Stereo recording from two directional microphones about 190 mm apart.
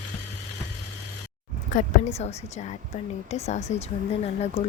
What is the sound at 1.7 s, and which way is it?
A woman's voice, 40° left (ahead or behind).